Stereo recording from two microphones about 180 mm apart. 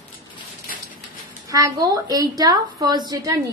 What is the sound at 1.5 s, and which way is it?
A woman's voice, 20° right (ahead or behind).